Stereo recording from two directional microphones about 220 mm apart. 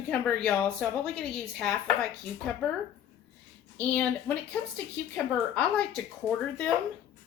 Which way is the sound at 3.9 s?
5° left (ahead or behind).